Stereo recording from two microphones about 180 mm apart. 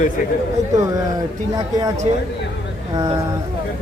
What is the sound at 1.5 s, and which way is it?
Speech, 20° right (ahead or behind).